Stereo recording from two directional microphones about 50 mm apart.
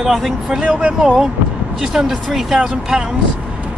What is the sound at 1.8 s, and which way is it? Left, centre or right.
Speech, centre.